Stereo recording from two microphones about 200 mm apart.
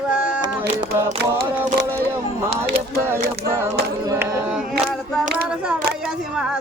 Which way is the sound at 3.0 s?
10° right (ahead or behind).